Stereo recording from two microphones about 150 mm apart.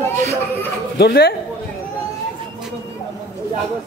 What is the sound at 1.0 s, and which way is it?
Speech, 90° left.